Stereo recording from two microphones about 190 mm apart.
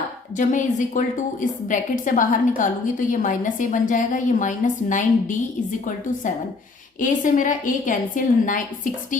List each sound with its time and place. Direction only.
0.3 s a woman's voice: 40° left (ahead or behind)
7.0 s a woman's voice: 45° left (ahead or behind)